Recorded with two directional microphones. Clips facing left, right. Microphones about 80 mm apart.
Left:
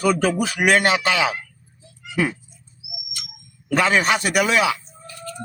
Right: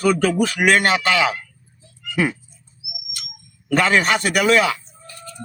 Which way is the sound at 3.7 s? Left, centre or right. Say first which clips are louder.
Right 1 dB; centre.